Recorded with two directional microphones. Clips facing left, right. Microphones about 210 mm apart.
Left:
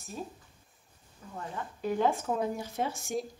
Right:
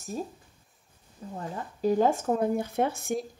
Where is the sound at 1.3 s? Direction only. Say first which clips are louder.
Right 3 dB; 35° right (ahead or behind).